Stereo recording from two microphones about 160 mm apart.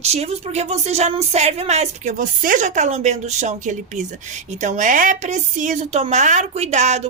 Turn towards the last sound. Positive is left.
turn(degrees=-45)  # may be behind; listen again after turning